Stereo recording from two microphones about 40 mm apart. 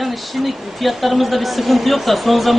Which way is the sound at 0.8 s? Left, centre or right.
Centre.